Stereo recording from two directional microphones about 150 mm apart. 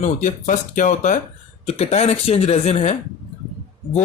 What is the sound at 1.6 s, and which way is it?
Speech, 45° left (ahead or behind).